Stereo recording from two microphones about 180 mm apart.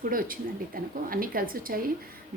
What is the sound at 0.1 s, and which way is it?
A woman's voice, 50° right (ahead or behind).